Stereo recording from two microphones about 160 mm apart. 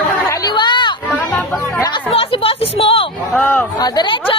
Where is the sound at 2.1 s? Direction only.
35° left (ahead or behind).